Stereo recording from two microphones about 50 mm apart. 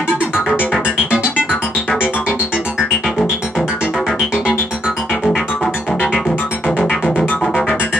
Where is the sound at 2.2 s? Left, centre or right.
Right.